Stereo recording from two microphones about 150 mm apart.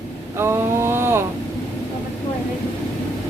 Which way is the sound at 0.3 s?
15° right (ahead or behind).